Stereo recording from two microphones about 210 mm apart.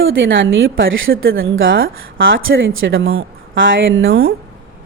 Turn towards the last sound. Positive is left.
turn(degrees=-70)  # may be behind; listen again after turning